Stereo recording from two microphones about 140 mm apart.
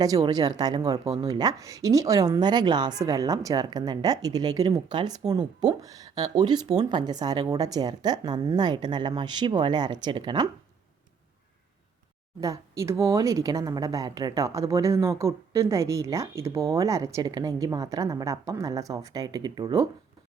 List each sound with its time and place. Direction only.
0.0 s a woman's voice: 25° right (ahead or behind)
12.4 s a woman's voice: 20° right (ahead or behind)